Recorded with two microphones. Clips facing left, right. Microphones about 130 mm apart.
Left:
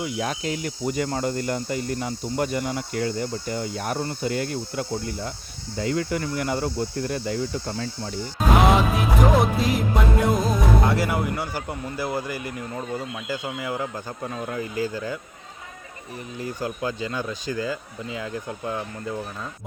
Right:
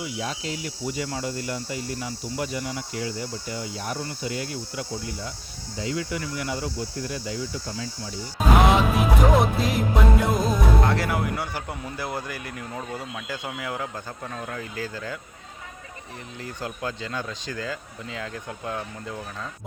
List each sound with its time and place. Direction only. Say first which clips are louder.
0.0 s speech: left 4 dB; 55° left (ahead or behind)
8.6 s music: left 1 dB; centre (ahead or behind)
16.4 s speech: left 4 dB; 5° left (ahead or behind)